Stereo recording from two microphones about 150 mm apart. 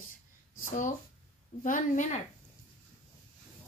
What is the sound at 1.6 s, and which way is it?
Speech, 60° left (ahead or behind).